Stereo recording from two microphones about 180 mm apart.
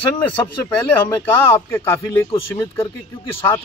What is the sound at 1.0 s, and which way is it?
Speech, 10° left (ahead or behind).